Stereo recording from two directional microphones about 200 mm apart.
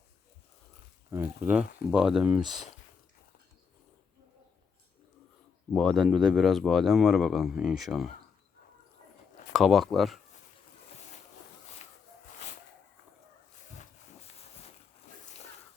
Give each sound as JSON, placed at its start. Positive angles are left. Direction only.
{"t": 1.1, "sound": "speech", "side_deg": -10}
{"t": 5.7, "sound": "speech", "side_deg": 0}
{"t": 9.5, "sound": "speech", "side_deg": 0}